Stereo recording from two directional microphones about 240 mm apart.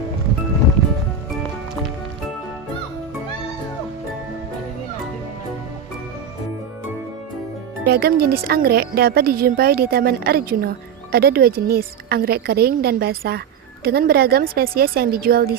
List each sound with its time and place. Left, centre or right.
7.9 s speech: right